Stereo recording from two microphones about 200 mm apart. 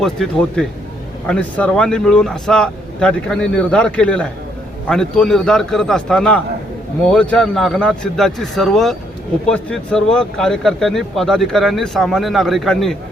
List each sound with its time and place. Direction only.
0.0 s speech: 5° left (ahead or behind)